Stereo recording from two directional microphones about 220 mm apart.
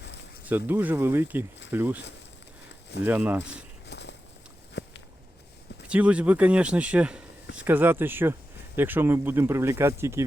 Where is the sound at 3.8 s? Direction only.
50° left (ahead or behind).